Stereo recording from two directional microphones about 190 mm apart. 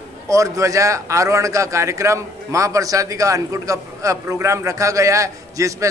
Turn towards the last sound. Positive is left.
turn(degrees=-15)  # may be behind; listen again after turning